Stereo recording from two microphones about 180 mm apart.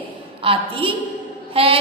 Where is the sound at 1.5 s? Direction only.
30° right (ahead or behind).